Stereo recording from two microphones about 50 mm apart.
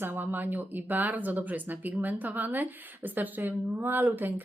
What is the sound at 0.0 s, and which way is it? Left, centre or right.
Speech, right.